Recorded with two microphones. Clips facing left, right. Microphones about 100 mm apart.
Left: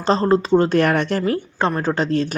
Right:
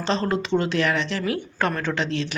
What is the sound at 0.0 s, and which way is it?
Speech, 40° left (ahead or behind).